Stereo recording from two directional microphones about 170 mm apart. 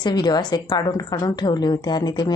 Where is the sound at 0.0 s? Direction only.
25° left (ahead or behind).